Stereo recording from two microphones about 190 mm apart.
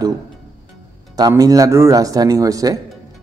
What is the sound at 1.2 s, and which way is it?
Speech, 20° right (ahead or behind).